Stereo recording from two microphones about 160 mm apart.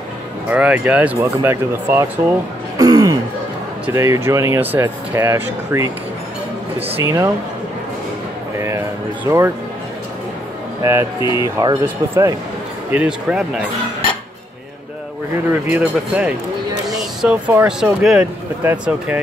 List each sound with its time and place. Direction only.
0.5 s speech: 10° right (ahead or behind)
2.8 s music: 25° right (ahead or behind)
3.8 s speech: 15° right (ahead or behind)
7.0 s speech: 20° right (ahead or behind)
8.5 s a sound: 20° right (ahead or behind)
9.3 s speech: 20° right (ahead or behind)
10.8 s speech: 15° right (ahead or behind)
11.1 s speech: 30° left (ahead or behind)
11.4 s speech: 20° right (ahead or behind)
12.9 s speech: 10° right (ahead or behind)
15.6 s speech: 5° right (ahead or behind)